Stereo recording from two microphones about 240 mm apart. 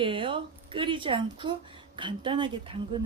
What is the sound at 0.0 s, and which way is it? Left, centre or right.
A woman's voice, right.